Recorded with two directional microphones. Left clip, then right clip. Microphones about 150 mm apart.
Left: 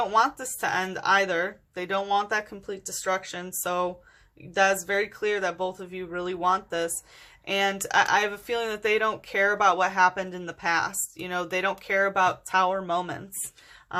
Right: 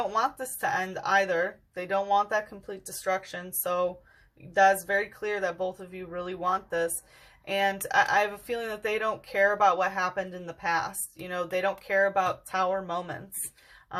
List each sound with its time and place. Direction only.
0.0 s speech: 30° left (ahead or behind)